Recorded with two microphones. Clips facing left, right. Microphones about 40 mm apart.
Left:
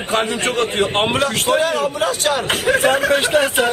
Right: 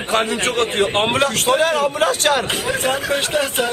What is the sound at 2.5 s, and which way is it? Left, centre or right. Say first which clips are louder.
Speech: left 5 dB; left.